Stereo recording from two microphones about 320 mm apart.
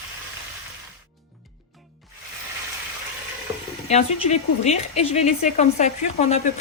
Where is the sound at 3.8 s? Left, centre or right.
Left.